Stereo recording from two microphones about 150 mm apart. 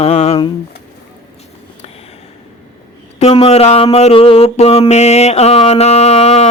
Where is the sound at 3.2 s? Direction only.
45° left (ahead or behind).